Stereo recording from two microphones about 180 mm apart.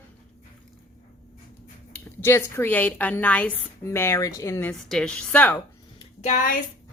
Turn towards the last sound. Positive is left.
turn(degrees=50)  # may be behind; listen again after turning